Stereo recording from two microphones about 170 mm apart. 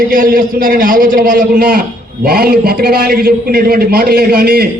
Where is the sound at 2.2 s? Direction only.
65° right (ahead or behind).